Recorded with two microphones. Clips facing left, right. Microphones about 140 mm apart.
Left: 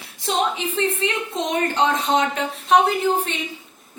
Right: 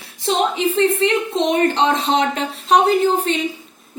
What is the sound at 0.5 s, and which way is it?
A woman's voice, 30° right (ahead or behind).